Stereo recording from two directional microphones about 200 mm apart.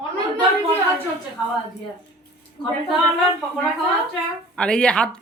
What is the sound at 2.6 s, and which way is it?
Speech, 20° left (ahead or behind).